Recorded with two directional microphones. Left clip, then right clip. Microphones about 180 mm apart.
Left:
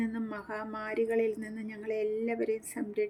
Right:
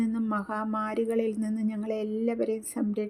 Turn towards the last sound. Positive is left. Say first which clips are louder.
# right 2 dB
turn(degrees=-15)  # may be behind; listen again after turning